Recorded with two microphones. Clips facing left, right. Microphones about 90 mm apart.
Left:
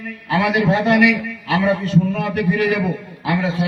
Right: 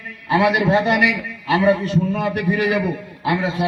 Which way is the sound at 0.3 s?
25° right (ahead or behind).